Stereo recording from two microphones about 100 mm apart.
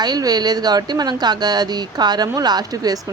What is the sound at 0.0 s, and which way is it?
Speech, 40° right (ahead or behind).